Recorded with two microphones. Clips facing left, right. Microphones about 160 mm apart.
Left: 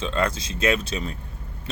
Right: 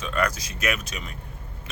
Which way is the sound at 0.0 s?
25° left (ahead or behind).